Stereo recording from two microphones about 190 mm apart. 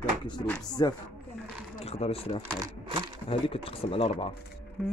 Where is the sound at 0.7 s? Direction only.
20° left (ahead or behind).